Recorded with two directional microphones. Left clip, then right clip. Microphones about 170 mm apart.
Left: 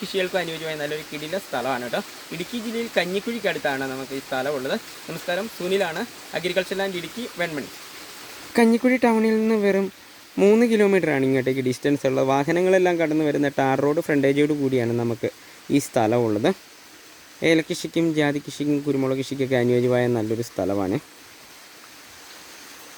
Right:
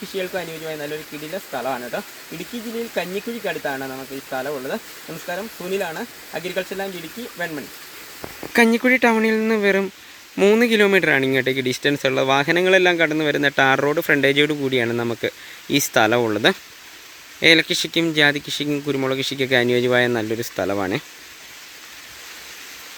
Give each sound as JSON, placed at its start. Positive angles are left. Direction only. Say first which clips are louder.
{"t": 0.1, "sound": "speech", "louder": "left 2 dB", "side_deg": 20}
{"t": 8.5, "sound": "speech", "louder": "right 3 dB", "side_deg": 5}
{"t": 20.6, "sound": "speech", "louder": "right 2 dB", "side_deg": 0}